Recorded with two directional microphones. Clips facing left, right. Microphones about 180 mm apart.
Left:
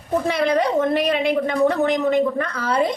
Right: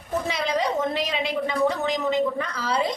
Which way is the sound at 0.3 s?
55° left (ahead or behind).